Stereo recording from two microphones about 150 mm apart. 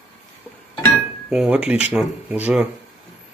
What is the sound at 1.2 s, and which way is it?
Speech, 5° right (ahead or behind).